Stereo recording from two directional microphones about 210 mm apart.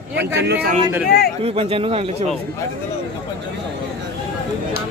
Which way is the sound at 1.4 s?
25° right (ahead or behind).